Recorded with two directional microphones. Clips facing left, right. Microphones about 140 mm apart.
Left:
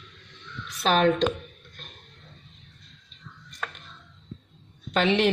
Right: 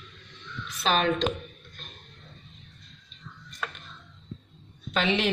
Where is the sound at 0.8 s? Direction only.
55° left (ahead or behind).